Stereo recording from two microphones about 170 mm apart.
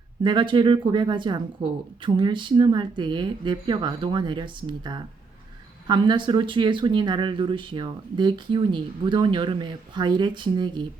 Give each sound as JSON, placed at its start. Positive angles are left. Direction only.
{"t": 0.2, "sound": "speech", "side_deg": -25}